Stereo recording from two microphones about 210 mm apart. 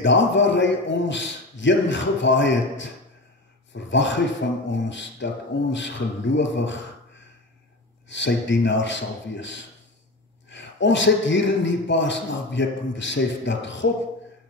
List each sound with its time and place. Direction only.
0.0 s a man's voice: 60° left (ahead or behind)
8.1 s a man's voice: 60° left (ahead or behind)